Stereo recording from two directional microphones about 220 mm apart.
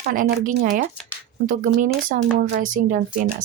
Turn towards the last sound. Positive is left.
turn(degrees=-40)  # may be behind; listen again after turning